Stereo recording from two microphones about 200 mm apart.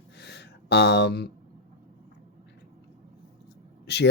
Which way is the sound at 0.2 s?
55° left (ahead or behind).